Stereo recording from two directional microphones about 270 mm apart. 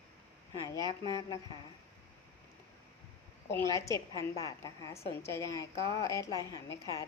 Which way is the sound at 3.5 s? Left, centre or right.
Centre.